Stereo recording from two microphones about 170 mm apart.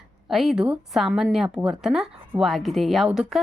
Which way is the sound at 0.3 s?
Centre (ahead or behind).